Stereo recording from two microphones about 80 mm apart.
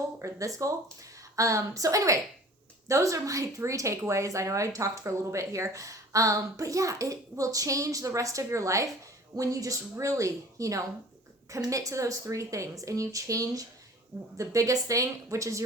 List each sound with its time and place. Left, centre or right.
0.2 s speech: right